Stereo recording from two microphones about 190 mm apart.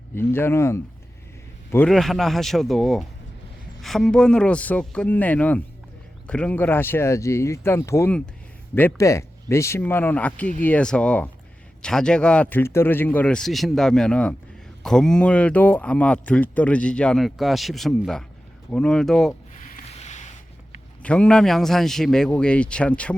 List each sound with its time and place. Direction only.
0.2 s speech: 10° left (ahead or behind)
19.5 s boat: 40° left (ahead or behind)
21.0 s speech: 5° left (ahead or behind)